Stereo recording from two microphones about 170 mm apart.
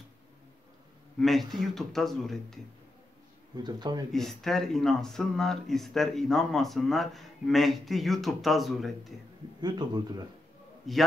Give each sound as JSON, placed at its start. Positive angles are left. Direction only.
{"t": 1.2, "sound": "speech", "side_deg": 0}
{"t": 3.5, "sound": "a man's voice", "side_deg": -25}
{"t": 4.1, "sound": "speech", "side_deg": 0}
{"t": 9.6, "sound": "a man's voice", "side_deg": -25}
{"t": 10.9, "sound": "speech", "side_deg": 0}